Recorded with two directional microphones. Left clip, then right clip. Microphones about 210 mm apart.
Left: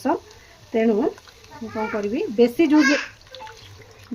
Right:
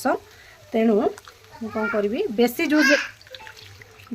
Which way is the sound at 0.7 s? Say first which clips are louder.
Even; 55° right (ahead or behind).